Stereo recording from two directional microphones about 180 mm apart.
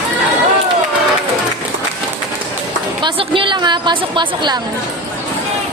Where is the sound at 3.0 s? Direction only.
25° right (ahead or behind).